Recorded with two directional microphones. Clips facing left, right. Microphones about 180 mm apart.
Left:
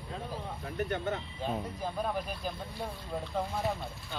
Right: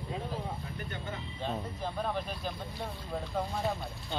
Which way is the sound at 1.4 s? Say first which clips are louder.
Left 1 dB; 10° left (ahead or behind).